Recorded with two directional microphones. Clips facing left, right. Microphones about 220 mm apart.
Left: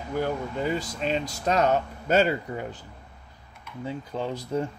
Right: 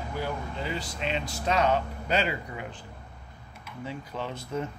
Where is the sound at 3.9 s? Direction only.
30° left (ahead or behind).